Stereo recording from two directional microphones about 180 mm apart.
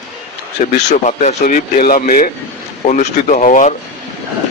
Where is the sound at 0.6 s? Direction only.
40° left (ahead or behind).